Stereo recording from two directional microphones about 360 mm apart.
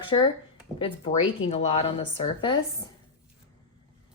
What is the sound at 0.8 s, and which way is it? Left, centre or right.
A woman's voice, centre.